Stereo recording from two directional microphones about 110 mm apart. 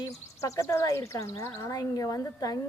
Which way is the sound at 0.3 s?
30° left (ahead or behind).